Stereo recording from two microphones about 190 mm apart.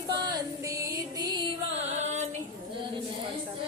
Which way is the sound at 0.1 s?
20° right (ahead or behind).